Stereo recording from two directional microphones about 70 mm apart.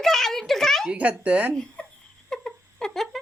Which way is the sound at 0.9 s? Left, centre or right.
Centre.